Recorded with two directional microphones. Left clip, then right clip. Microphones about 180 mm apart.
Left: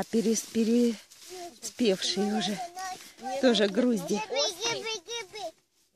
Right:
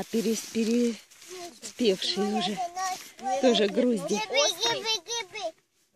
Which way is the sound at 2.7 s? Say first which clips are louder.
Right 6 dB; 45° right (ahead or behind).